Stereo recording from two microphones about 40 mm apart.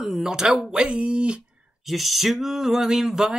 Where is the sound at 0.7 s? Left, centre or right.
Right.